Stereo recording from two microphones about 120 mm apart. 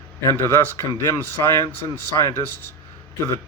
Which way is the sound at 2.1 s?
30° left (ahead or behind).